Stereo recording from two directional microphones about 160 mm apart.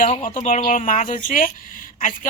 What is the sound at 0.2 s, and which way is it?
Speech, 55° left (ahead or behind).